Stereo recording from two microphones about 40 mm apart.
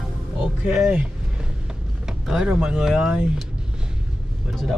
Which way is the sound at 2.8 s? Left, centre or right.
Centre.